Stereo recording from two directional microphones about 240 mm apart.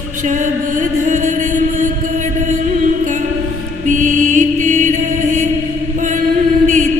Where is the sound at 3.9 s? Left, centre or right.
Right.